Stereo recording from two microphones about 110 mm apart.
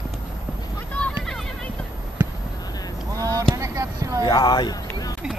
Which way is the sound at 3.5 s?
30° right (ahead or behind).